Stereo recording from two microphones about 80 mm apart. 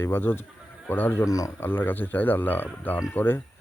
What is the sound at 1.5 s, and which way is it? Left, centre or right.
Speech, left.